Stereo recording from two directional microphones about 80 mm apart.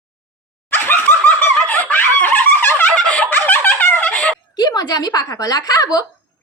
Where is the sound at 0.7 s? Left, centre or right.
Left.